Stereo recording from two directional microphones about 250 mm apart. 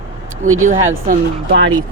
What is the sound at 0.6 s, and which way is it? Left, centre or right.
Speech, right.